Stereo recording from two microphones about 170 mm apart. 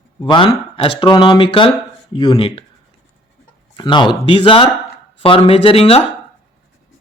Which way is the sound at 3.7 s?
25° left (ahead or behind).